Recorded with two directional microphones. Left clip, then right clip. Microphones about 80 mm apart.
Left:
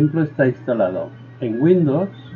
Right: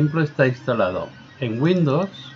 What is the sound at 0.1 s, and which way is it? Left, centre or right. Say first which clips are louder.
Speech: left 1 dB; right.